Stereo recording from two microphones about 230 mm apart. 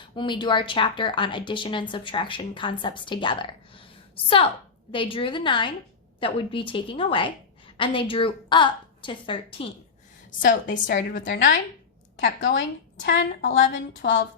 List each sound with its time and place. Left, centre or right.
0.2 s a woman's voice: centre
10.4 s a woman's voice: left